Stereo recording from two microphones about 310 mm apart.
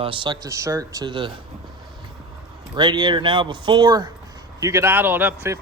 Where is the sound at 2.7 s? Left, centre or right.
Centre.